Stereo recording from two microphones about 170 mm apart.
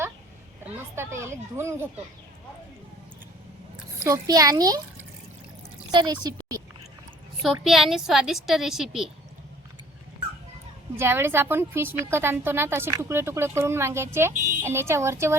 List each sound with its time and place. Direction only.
0.6 s a woman's voice: 10° right (ahead or behind)
4.0 s a child's voice: 20° right (ahead or behind)
5.9 s a child's voice: 25° right (ahead or behind)
7.6 s a woman's voice: centre (ahead or behind)
10.9 s a woman's voice: 15° right (ahead or behind)